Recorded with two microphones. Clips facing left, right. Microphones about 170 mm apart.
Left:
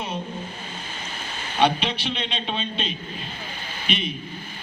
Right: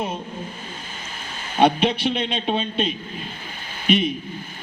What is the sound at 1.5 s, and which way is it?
A man's voice, 50° right (ahead or behind).